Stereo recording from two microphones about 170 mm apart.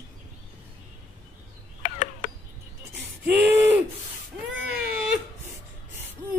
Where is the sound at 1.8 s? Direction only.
45° left (ahead or behind).